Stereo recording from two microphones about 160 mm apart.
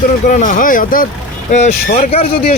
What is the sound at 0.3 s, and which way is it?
Speech, 55° left (ahead or behind).